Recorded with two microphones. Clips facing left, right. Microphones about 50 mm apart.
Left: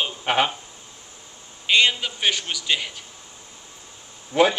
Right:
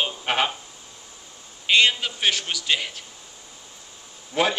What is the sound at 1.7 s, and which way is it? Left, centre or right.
A man's voice, centre.